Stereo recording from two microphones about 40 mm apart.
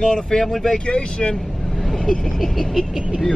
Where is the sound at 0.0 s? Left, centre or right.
Centre.